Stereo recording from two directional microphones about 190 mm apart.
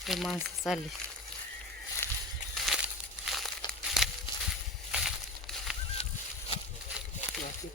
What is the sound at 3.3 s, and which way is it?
Crumpling, centre (ahead or behind).